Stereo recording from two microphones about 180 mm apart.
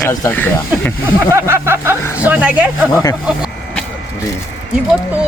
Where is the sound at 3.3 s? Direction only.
5° right (ahead or behind).